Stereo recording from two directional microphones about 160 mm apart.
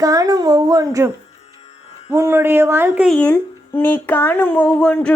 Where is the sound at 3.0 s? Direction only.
10° left (ahead or behind).